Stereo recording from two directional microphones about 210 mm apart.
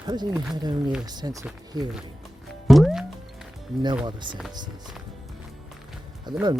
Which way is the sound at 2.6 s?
Centre (ahead or behind).